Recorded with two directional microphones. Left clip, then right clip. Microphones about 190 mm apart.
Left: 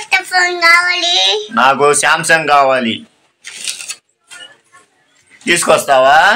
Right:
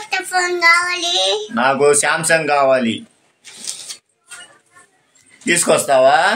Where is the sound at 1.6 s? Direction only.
5° right (ahead or behind).